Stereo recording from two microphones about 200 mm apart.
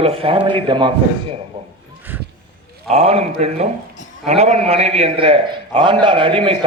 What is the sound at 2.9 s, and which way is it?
A man's voice, 30° right (ahead or behind).